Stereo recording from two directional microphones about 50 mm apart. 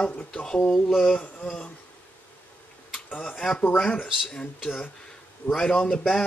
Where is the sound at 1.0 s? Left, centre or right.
Left.